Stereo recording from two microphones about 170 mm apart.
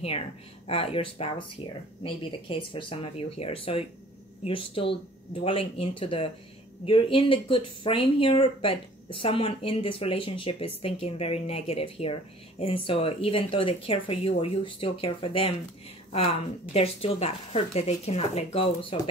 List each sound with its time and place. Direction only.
0.7 s speech: 35° left (ahead or behind)